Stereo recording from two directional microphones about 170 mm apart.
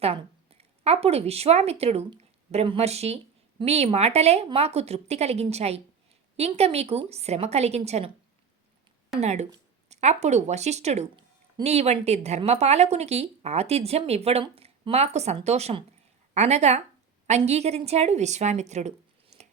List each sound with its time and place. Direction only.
0.0 s a woman's voice: 35° right (ahead or behind)
9.2 s a woman's voice: 40° right (ahead or behind)